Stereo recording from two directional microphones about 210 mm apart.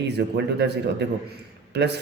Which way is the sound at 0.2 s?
55° right (ahead or behind).